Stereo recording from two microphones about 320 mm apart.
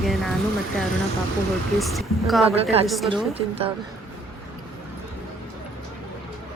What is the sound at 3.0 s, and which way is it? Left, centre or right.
Speech, centre.